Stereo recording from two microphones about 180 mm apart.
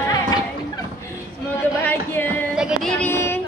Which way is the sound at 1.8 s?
10° left (ahead or behind).